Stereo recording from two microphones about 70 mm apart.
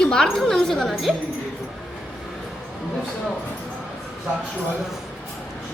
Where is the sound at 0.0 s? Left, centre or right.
Centre.